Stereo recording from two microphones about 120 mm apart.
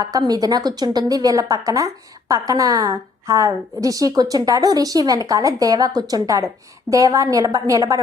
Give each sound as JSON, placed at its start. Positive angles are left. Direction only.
{"t": 0.0, "sound": "a woman's voice", "side_deg": -30}